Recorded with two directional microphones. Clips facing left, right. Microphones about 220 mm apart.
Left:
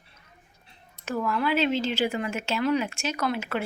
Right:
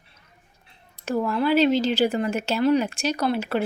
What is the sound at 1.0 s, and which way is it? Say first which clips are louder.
Speech: right 4 dB; 30° right (ahead or behind).